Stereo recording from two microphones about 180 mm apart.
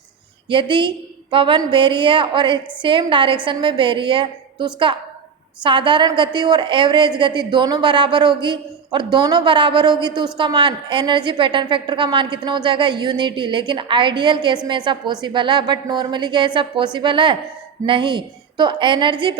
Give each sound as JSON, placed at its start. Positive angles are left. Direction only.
{"t": 0.5, "sound": "a woman's voice", "side_deg": -25}